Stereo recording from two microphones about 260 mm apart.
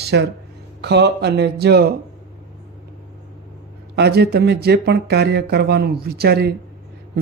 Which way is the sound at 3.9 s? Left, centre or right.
Right.